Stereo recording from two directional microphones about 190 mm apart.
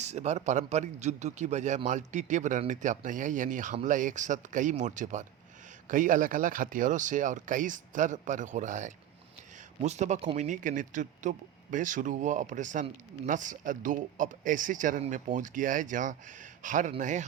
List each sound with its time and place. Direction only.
0.0 s a man's voice: 35° right (ahead or behind)